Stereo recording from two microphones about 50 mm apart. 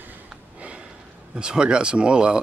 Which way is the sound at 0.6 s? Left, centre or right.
Right.